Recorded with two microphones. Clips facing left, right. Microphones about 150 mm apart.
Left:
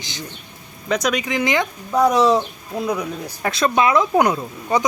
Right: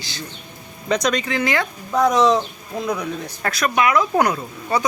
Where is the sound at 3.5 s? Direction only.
25° left (ahead or behind).